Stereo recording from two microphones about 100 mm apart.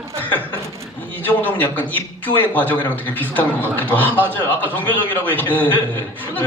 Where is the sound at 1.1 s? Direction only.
20° left (ahead or behind).